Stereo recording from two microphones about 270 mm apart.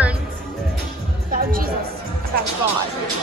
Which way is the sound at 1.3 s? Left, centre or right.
Right.